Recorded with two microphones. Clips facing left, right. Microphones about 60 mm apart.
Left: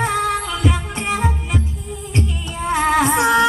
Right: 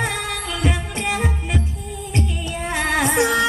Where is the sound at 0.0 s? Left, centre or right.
Left.